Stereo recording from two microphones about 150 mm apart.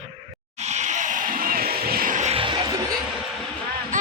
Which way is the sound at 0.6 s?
50° right (ahead or behind).